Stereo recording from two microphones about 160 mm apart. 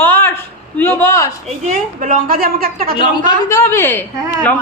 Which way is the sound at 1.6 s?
55° right (ahead or behind).